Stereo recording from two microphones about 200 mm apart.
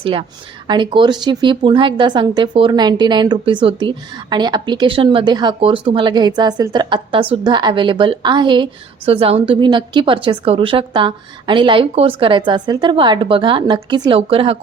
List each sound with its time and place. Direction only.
0.0 s a woman's voice: 25° right (ahead or behind)